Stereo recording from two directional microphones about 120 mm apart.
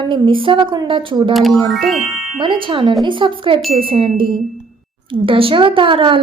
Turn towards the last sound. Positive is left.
turn(degrees=-45)  # may be behind; listen again after turning